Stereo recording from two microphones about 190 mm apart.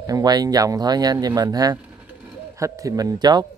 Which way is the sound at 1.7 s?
10° right (ahead or behind).